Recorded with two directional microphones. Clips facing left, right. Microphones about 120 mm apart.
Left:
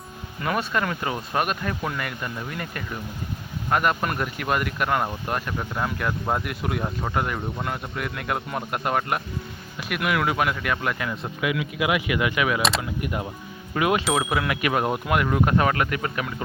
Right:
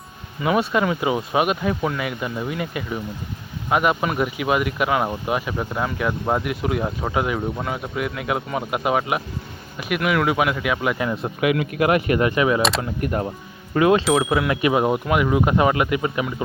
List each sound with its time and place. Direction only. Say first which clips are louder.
0.3 s speech: right 5 dB; 5° right (ahead or behind)
10.9 s speech: right 6 dB; 20° right (ahead or behind)
11.3 s speech: right 6 dB; 55° right (ahead or behind); by 13.2 s 40° right (ahead or behind)
13.7 s speech: right 6 dB; 30° right (ahead or behind)
14.0 s speech: right 5 dB; centre (ahead or behind); by 16.2 s 15° right (ahead or behind)